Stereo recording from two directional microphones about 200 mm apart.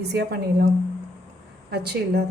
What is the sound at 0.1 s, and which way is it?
Speech, 50° right (ahead or behind).